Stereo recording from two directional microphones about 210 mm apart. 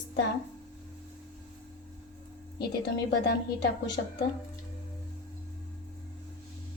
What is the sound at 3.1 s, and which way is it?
Speech, 55° left (ahead or behind).